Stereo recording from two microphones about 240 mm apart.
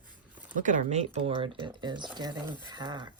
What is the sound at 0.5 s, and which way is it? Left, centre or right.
Speech, right.